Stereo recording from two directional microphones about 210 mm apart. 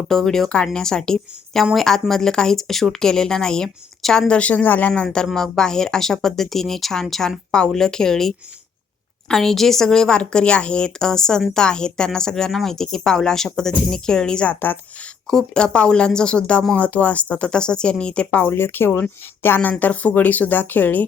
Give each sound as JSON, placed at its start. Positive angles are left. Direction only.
{"t": 0.1, "sound": "speech", "side_deg": 0}
{"t": 9.3, "sound": "speech", "side_deg": 0}